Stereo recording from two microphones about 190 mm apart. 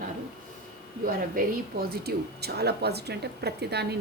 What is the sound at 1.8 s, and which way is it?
Speech, 55° right (ahead or behind).